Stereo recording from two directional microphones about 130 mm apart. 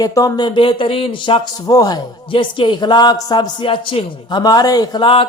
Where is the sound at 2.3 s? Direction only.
40° left (ahead or behind).